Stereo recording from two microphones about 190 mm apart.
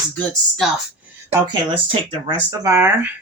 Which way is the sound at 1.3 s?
25° right (ahead or behind).